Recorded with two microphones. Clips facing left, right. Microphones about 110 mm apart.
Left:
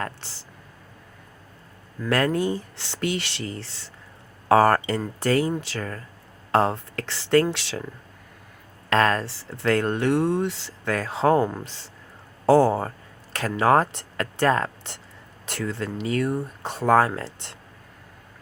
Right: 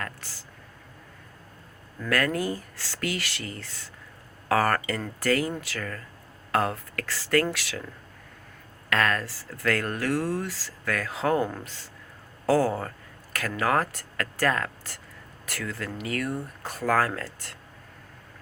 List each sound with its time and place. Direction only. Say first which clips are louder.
0.0 s speech: left 5 dB; 25° left (ahead or behind)
2.0 s speech: left 4 dB; 25° left (ahead or behind)
8.9 s speech: left 5 dB; 30° left (ahead or behind)